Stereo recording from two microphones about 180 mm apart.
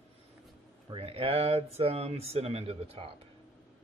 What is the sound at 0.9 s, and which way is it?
Speech, 30° right (ahead or behind).